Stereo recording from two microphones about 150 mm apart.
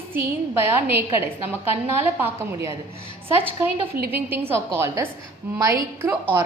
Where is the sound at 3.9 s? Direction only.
90° right.